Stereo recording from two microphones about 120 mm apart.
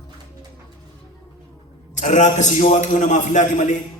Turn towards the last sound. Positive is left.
turn(degrees=90)